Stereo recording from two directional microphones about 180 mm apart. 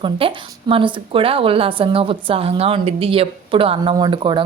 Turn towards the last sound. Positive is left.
turn(degrees=-25)  # may be behind; listen again after turning